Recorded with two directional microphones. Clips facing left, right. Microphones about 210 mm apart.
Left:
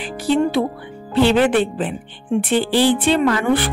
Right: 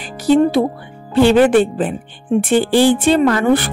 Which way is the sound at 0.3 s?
40° right (ahead or behind).